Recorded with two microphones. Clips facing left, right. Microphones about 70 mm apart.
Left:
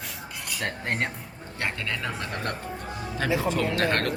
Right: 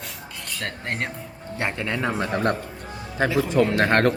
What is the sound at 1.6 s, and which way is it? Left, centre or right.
Speech, right.